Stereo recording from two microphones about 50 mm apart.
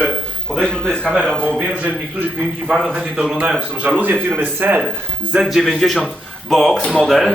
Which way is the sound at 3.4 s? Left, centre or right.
Right.